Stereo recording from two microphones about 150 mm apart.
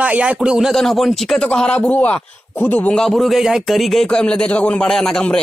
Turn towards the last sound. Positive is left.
turn(degrees=5)  # may be behind; listen again after turning